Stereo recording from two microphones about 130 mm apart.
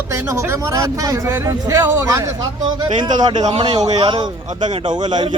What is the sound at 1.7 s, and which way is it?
Speech, 20° right (ahead or behind).